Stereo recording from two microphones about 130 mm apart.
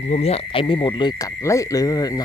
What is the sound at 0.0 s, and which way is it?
Frog, 55° left (ahead or behind).